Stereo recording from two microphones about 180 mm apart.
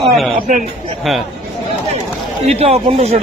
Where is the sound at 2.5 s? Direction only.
35° right (ahead or behind).